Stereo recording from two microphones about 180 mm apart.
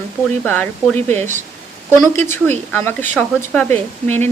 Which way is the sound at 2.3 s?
10° left (ahead or behind).